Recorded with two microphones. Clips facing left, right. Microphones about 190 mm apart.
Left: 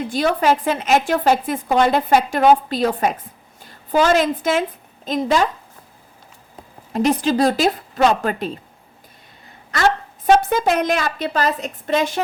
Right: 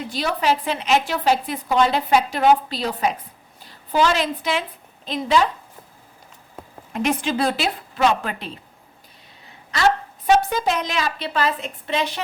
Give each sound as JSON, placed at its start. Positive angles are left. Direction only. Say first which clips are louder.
{"t": 0.1, "sound": "a woman's voice", "louder": "left 4 dB", "side_deg": 50}
{"t": 6.9, "sound": "a woman's voice", "louder": "left 5 dB", "side_deg": 35}
{"t": 10.2, "sound": "a woman's voice", "louder": "left 3 dB", "side_deg": 50}